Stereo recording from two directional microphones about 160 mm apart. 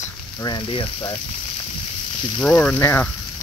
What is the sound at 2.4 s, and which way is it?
Speech, 5° left (ahead or behind).